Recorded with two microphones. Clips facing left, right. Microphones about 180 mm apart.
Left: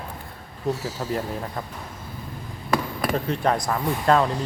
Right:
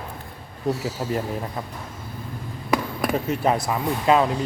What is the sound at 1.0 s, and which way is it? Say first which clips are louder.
Speech: even; 20° right (ahead or behind).